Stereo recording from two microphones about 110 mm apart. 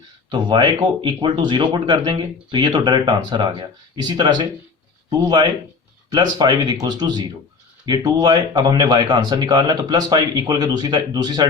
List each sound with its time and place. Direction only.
0.3 s speech: 40° right (ahead or behind)
6.1 s speech: 40° right (ahead or behind)